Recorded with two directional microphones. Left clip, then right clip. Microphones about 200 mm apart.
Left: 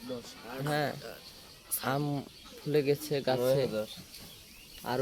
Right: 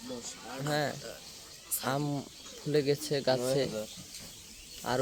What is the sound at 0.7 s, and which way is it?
Speech, centre (ahead or behind).